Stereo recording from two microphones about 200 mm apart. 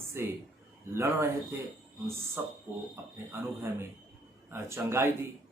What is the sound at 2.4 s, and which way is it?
Speech, 10° right (ahead or behind).